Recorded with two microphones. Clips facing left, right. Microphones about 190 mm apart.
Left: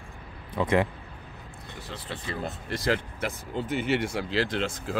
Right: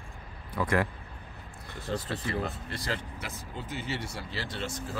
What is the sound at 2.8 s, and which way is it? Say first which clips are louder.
Speech: left 9 dB; 65° left (ahead or behind).